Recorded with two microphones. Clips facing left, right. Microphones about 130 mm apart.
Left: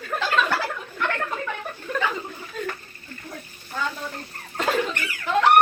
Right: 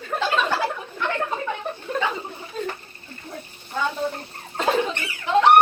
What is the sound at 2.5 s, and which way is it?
Water, 30° right (ahead or behind).